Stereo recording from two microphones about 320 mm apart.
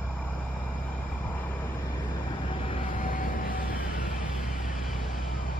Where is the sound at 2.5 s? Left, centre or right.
Centre.